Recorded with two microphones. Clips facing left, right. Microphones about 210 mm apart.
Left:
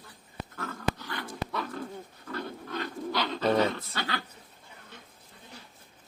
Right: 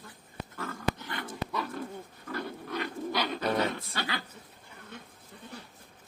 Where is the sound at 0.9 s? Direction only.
20° right (ahead or behind).